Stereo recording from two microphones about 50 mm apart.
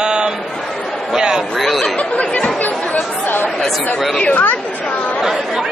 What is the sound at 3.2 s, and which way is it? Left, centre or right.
Chatter, left.